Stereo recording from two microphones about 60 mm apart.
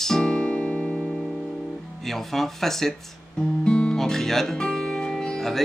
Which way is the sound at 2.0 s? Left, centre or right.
Centre.